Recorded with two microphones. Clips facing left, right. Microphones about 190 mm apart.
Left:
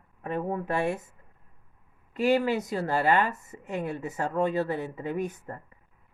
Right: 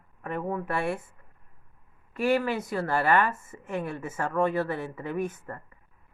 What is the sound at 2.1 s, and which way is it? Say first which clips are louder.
Speech: left 1 dB; 20° left (ahead or behind).